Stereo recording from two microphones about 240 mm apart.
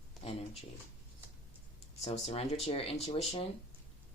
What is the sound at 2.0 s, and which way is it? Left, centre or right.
Speech, left.